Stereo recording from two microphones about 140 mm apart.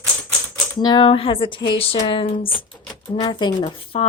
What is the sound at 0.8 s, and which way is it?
A woman's voice, 30° left (ahead or behind).